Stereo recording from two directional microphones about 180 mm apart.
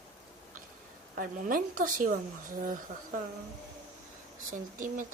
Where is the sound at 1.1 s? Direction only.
50° right (ahead or behind).